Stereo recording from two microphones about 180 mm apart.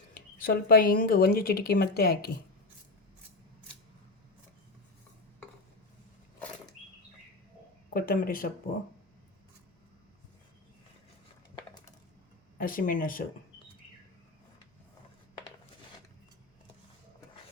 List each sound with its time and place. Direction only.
0.1 s speech: 55° left (ahead or behind)
7.9 s speech: 55° left (ahead or behind)
12.5 s speech: 50° left (ahead or behind)